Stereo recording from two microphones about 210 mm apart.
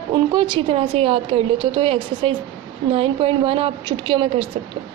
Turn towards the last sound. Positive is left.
turn(degrees=-25)  # may be behind; listen again after turning